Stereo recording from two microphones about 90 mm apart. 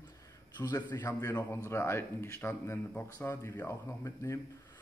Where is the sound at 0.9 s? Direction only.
30° left (ahead or behind).